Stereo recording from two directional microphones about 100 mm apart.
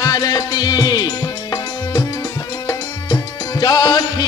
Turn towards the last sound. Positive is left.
turn(degrees=45)  # may be behind; listen again after turning